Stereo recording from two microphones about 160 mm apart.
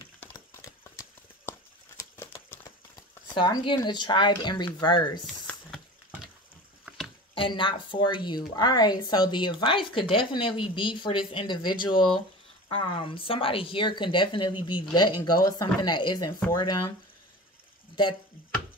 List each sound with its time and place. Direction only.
0.6 s clip-clop: 20° left (ahead or behind)
2.0 s a sound: 20° left (ahead or behind)
3.3 s speech: 30° left (ahead or behind)
5.2 s a sound: 5° left (ahead or behind)
7.3 s a woman's voice: 30° left (ahead or behind)
18.0 s speech: 30° left (ahead or behind)